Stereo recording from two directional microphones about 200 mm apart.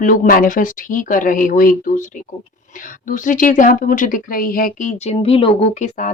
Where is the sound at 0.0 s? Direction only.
45° left (ahead or behind).